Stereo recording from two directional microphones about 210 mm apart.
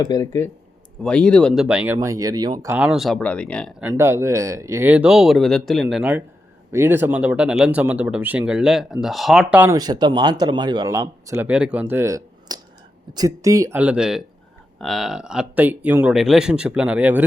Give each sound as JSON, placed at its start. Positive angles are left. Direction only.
{"t": 0.0, "sound": "speech", "side_deg": 15}
{"t": 3.8, "sound": "speech", "side_deg": -10}